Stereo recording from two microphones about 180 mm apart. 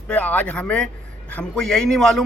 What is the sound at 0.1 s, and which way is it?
A man's voice, 10° left (ahead or behind).